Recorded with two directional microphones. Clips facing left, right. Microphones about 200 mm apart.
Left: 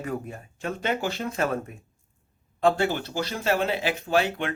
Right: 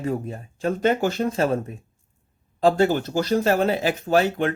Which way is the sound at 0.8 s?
45° right (ahead or behind).